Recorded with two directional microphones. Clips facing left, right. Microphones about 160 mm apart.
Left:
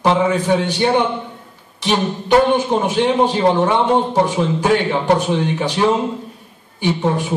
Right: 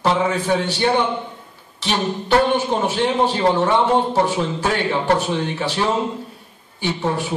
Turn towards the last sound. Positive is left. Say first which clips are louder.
# left 4 dB
turn(degrees=15)  # may be behind; listen again after turning